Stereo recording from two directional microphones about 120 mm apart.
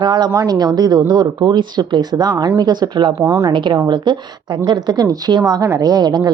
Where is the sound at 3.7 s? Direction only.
35° right (ahead or behind).